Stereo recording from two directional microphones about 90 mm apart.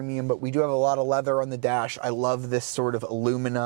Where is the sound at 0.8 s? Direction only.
30° right (ahead or behind).